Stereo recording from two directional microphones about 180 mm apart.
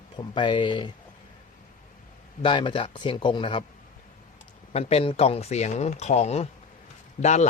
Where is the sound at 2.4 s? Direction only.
25° left (ahead or behind).